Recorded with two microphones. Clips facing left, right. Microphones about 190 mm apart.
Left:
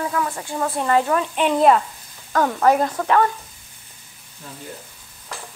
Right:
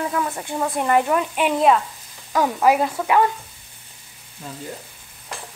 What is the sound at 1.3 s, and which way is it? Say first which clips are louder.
Speech: left 3 dB; 5° right (ahead or behind).